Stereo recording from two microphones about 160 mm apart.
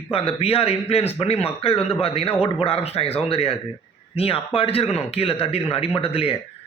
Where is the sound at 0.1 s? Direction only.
35° left (ahead or behind).